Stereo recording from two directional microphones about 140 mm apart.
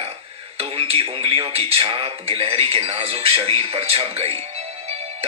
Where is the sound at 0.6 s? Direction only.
40° right (ahead or behind).